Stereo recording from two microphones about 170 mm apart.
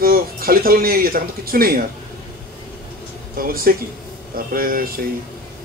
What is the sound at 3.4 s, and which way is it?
Speech, 60° right (ahead or behind).